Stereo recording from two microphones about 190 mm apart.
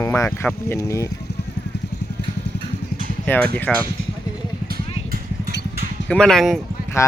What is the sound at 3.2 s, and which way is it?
Speech, 5° left (ahead or behind).